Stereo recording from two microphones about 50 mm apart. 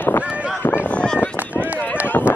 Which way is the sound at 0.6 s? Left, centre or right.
Left.